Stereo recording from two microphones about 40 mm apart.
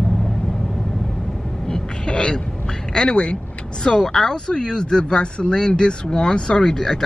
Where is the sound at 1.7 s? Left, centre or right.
Left.